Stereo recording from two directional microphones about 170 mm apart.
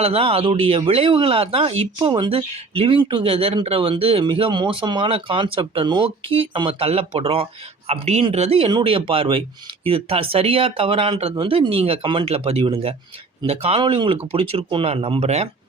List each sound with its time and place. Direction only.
0.0 s speech: 35° right (ahead or behind)